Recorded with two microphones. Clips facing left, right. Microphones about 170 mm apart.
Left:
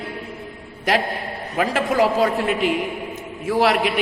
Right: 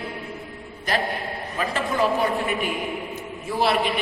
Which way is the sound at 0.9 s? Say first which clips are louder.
Left 4 dB; 90° left.